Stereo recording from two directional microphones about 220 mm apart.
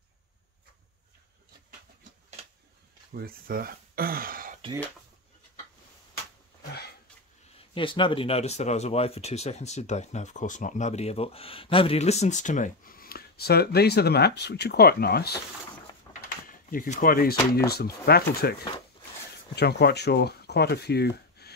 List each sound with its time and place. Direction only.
3.2 s speech: 40° right (ahead or behind)
7.7 s speech: 25° left (ahead or behind); by 15.4 s 45° left (ahead or behind)
16.1 s a sound: 40° left (ahead or behind)
17.6 s speech: 45° left (ahead or behind)